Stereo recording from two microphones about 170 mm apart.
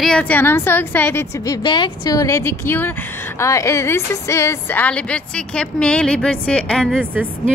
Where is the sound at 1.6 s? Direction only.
25° left (ahead or behind); by 6.8 s 5° left (ahead or behind).